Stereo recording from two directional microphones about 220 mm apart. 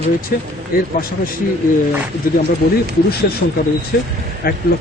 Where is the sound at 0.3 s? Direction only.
45° left (ahead or behind).